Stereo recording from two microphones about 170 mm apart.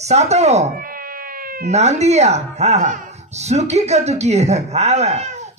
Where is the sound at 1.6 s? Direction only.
40° right (ahead or behind).